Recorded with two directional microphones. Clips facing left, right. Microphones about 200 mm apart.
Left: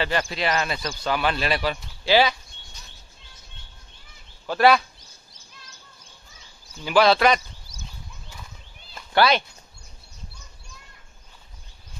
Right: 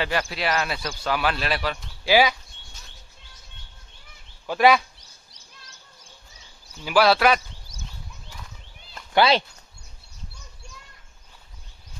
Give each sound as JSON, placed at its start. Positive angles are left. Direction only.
{"t": 0.0, "sound": "speech", "side_deg": -5}
{"t": 2.0, "sound": "speech", "side_deg": -10}
{"t": 4.5, "sound": "speech", "side_deg": -10}
{"t": 6.8, "sound": "speech", "side_deg": -5}
{"t": 9.1, "sound": "speech", "side_deg": -25}